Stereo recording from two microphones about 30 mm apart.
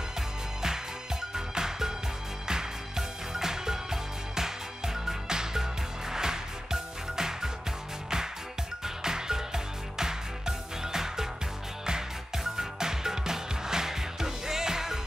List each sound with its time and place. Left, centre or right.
1.3 s music: centre
8.8 s music: centre
12.5 s music: centre